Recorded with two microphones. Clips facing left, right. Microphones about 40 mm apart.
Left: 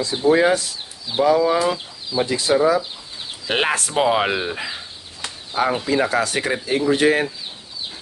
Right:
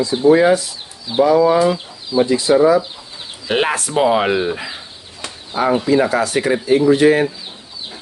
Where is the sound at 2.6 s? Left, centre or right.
Right.